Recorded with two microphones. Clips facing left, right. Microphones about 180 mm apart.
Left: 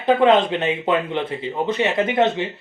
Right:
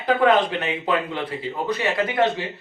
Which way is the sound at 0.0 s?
25° left (ahead or behind).